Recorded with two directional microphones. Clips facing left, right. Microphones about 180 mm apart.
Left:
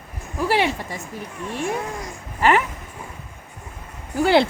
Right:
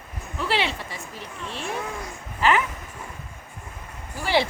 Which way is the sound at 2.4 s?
55° left (ahead or behind).